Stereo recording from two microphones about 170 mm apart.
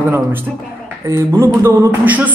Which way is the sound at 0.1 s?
10° right (ahead or behind).